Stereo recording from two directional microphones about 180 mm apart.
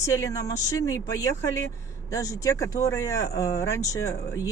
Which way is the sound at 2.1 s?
20° left (ahead or behind).